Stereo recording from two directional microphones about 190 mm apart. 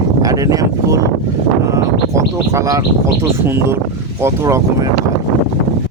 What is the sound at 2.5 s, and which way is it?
Speech, 15° right (ahead or behind).